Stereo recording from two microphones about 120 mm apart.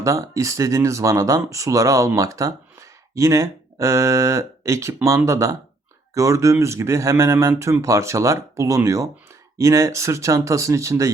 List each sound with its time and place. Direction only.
0.0 s speech: 25° right (ahead or behind)